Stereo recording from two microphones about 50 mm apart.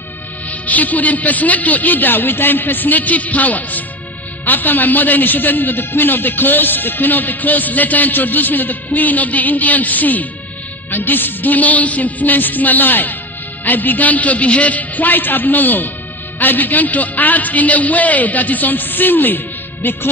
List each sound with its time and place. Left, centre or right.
0.5 s a man's voice: left